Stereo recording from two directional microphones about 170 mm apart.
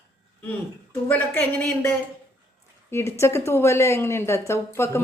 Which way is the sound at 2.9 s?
15° left (ahead or behind).